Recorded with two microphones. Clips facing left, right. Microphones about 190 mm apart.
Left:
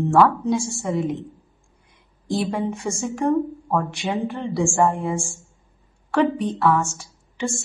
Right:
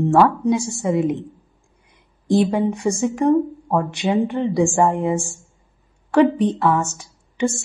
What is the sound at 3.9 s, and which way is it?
A woman's voice, centre (ahead or behind).